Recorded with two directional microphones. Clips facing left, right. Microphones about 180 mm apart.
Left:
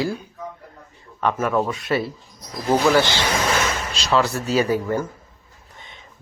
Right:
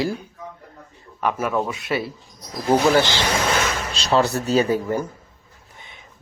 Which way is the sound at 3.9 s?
30° right (ahead or behind).